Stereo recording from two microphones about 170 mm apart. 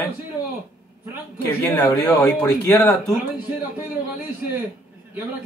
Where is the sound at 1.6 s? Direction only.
20° left (ahead or behind).